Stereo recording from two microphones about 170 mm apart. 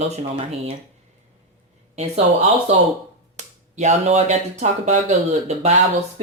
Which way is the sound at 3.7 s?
40° right (ahead or behind).